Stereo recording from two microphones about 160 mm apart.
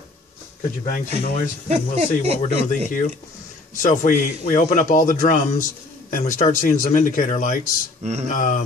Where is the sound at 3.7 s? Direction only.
55° left (ahead or behind).